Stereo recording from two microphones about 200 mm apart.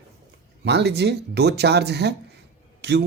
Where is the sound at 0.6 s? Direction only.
60° right (ahead or behind).